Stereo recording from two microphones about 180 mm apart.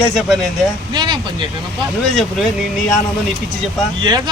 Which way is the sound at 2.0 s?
Centre (ahead or behind).